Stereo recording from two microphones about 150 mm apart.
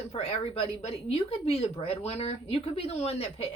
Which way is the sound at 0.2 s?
45° left (ahead or behind).